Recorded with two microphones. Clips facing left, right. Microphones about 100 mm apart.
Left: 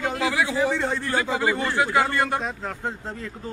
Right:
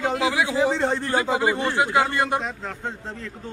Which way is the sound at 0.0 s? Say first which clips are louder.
Right 2 dB; 20° right (ahead or behind).